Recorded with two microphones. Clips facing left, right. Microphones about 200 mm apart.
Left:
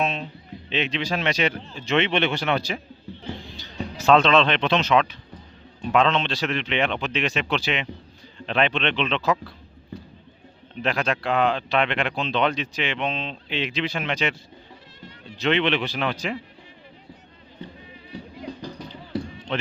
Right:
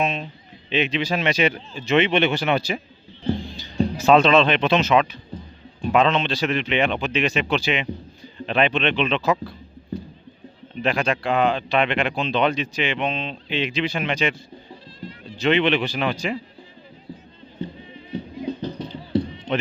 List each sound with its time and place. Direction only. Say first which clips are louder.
0.0 s a man's voice: right 2 dB; centre (ahead or behind)
3.9 s speech: right 2 dB; 5° right (ahead or behind)
5.3 s a sound: right 9 dB; 25° right (ahead or behind)
5.8 s speech: right 2 dB; 5° right (ahead or behind)
10.8 s speech: right 2 dB; centre (ahead or behind)
15.4 s speech: right 3 dB; centre (ahead or behind)
18.6 s music: right 6 dB; 25° right (ahead or behind)